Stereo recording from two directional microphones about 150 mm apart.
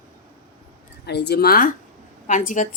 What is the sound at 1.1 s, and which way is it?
Speech, 90° left.